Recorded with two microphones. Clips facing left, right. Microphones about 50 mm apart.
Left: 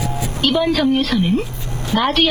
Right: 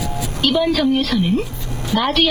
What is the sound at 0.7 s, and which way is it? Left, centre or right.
A woman's voice, centre.